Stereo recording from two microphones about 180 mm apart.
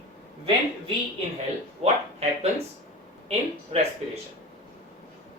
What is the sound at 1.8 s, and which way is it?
Speech, 35° right (ahead or behind).